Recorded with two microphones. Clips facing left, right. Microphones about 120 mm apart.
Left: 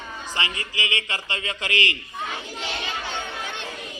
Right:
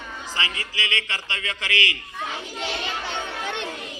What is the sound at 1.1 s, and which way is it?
Speech, 25° left (ahead or behind).